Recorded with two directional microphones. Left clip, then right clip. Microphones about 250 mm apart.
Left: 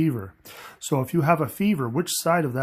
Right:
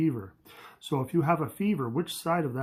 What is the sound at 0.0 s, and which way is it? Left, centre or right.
Speech, left.